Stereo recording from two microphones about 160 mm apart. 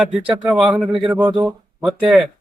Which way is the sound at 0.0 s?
5° right (ahead or behind).